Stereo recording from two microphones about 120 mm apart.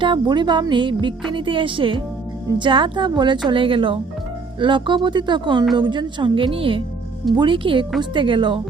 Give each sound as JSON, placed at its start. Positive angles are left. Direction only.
{"t": 0.0, "sound": "speech", "side_deg": -40}